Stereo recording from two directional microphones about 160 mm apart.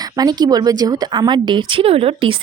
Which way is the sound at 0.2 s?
25° right (ahead or behind).